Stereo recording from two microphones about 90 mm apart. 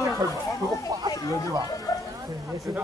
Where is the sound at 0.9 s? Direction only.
45° right (ahead or behind).